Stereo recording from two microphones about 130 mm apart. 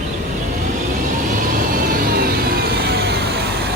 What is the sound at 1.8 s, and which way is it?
Vehicle, 90° right.